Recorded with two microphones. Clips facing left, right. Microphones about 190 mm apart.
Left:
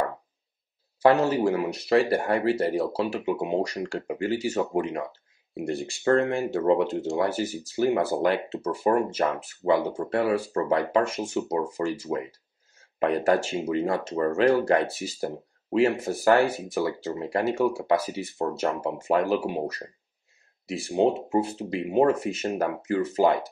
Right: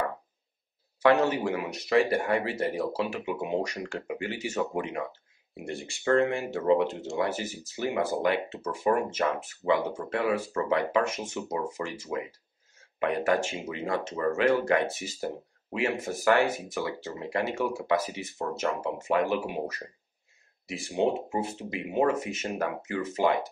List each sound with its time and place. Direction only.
1.0 s speech: 35° left (ahead or behind)